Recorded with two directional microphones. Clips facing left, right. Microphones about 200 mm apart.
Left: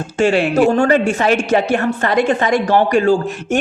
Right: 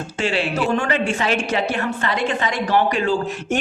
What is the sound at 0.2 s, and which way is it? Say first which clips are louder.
A woman's voice: left 9 dB; 50° left (ahead or behind).